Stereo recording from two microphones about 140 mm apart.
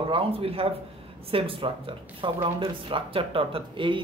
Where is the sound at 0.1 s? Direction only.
45° right (ahead or behind).